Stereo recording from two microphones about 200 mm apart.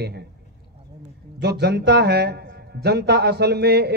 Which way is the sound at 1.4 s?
55° right (ahead or behind).